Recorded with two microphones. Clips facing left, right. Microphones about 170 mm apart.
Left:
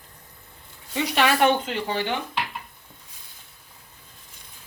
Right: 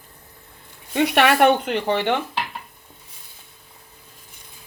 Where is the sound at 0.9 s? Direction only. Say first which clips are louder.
Right 5 dB; 60° right (ahead or behind).